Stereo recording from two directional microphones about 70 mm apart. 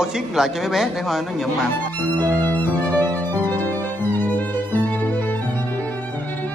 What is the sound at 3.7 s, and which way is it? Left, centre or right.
Violin, left.